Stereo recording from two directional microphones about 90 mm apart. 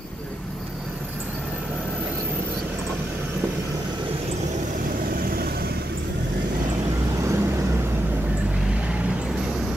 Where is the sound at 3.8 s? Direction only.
55° right (ahead or behind).